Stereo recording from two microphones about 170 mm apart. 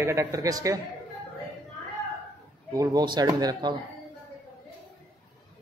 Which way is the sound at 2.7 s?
20° right (ahead or behind).